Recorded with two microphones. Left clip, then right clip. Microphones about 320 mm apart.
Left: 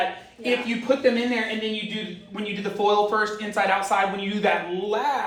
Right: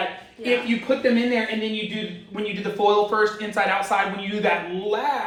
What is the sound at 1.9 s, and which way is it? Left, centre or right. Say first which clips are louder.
Speech: right 1 dB; centre.